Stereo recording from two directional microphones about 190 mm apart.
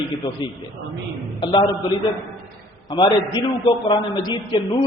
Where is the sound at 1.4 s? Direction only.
25° left (ahead or behind).